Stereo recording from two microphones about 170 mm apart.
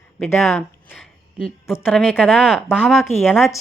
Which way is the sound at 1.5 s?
5° right (ahead or behind).